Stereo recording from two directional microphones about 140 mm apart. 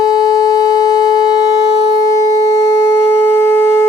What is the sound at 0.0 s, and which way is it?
Sine wave, 25° left (ahead or behind).